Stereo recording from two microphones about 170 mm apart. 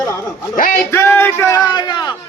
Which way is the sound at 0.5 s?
55° left (ahead or behind).